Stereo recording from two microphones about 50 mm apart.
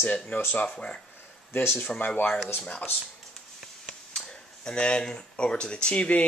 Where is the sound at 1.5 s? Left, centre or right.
Left.